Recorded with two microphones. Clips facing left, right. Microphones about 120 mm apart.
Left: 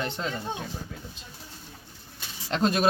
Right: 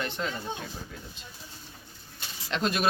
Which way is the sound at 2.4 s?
40° left (ahead or behind).